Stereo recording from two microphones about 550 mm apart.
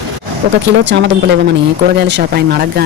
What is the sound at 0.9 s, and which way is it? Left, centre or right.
Speech, centre.